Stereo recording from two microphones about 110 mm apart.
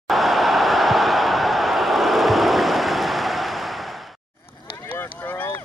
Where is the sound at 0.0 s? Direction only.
Centre (ahead or behind).